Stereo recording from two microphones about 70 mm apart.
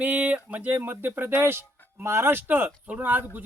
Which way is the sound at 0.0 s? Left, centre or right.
Right.